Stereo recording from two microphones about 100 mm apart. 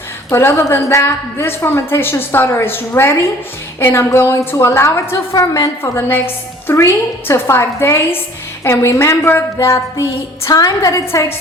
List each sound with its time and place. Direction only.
0.3 s a woman's voice: 25° left (ahead or behind)
10.5 s a woman's voice: 40° left (ahead or behind)